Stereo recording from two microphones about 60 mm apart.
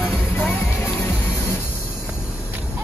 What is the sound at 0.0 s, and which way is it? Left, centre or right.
Music, left.